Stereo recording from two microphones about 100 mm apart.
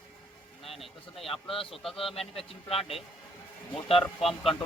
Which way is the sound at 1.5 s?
65° left (ahead or behind).